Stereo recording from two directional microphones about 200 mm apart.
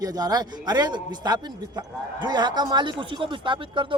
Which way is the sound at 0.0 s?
20° right (ahead or behind).